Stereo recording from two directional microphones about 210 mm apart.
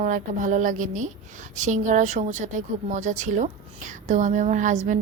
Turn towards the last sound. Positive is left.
turn(degrees=-35)  # may be behind; listen again after turning